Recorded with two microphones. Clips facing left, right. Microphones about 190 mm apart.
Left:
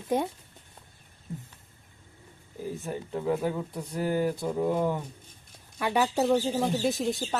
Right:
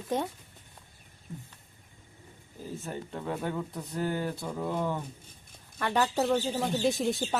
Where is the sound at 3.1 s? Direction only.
5° left (ahead or behind).